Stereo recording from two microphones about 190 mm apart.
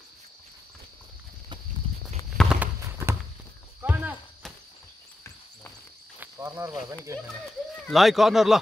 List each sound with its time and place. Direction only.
2.3 s clip-clop: 5° right (ahead or behind)
3.8 s cricket: 10° right (ahead or behind)
6.1 s cricket: 15° right (ahead or behind)
7.8 s speech: centre (ahead or behind)